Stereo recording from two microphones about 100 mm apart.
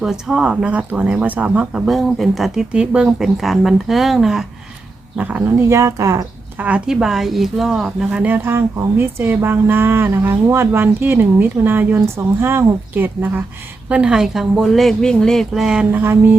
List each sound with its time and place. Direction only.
0.0 s speech: 5° right (ahead or behind)
5.1 s speech: 15° right (ahead or behind)
5.6 s speech: 30° right (ahead or behind)
6.6 s speech: 15° right (ahead or behind)
8.4 s speech: 25° right (ahead or behind); by 15.9 s 5° right (ahead or behind)
15.9 s speech: 20° right (ahead or behind)